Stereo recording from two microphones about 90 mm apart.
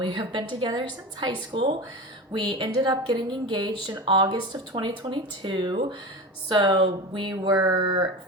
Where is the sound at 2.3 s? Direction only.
50° right (ahead or behind).